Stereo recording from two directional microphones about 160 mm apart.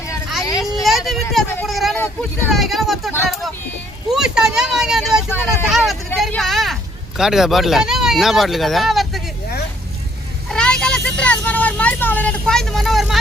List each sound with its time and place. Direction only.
0.6 s a sound: centre (ahead or behind)
2.5 s speech: centre (ahead or behind)
4.1 s speech: 5° right (ahead or behind)
5.3 s speech: 15° left (ahead or behind)
5.6 s speech: centre (ahead or behind)
10.5 s vehicle: 5° left (ahead or behind)